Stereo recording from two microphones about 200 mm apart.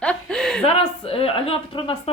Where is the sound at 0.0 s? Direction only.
5° left (ahead or behind).